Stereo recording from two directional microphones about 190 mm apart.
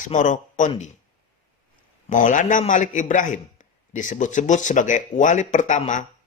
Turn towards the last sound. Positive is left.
turn(degrees=40)  # may be behind; listen again after turning